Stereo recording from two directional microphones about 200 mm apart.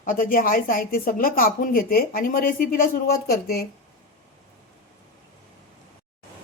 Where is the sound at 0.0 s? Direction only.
45° left (ahead or behind).